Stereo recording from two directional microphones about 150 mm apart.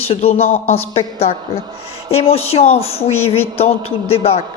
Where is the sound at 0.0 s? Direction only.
40° left (ahead or behind).